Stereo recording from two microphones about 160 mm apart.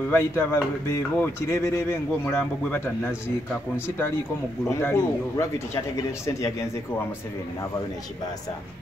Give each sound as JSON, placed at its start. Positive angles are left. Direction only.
{"t": 0.1, "sound": "speech", "side_deg": 15}
{"t": 4.6, "sound": "speech", "side_deg": 15}